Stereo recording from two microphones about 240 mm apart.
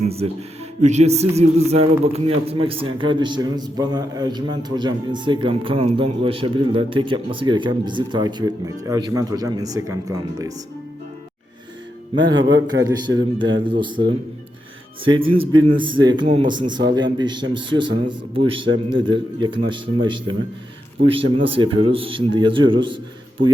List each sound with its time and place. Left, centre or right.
0.0 s a man's voice: right
12.5 s a man's voice: right
12.8 s a man's voice: centre
21.0 s a man's voice: right
21.3 s a man's voice: right